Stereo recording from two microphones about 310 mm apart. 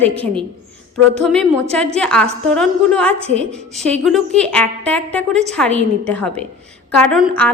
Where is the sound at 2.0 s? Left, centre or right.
Centre.